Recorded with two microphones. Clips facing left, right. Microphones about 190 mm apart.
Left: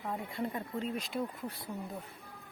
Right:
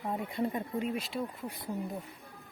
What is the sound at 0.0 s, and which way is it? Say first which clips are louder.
Speech: right 4 dB; 20° right (ahead or behind).